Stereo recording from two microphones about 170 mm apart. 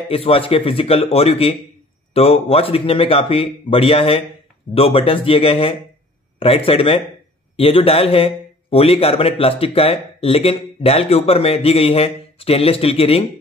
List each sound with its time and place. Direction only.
0.1 s a man's voice: 35° left (ahead or behind)